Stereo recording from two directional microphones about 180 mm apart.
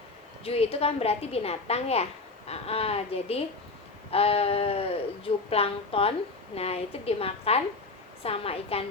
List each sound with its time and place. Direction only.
0.4 s a woman's voice: 35° left (ahead or behind)